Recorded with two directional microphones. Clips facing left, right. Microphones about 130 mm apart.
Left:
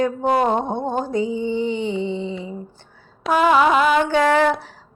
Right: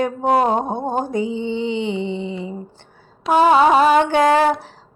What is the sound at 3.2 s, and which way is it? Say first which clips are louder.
Mantra: right 3 dB; 30° right (ahead or behind).